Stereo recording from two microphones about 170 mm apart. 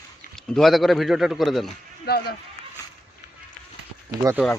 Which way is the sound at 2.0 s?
70° left (ahead or behind).